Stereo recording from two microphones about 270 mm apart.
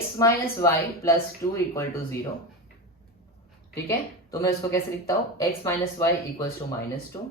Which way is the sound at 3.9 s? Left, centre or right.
Centre.